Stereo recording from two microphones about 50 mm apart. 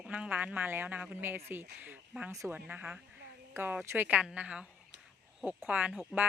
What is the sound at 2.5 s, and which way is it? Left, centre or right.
Speech, right.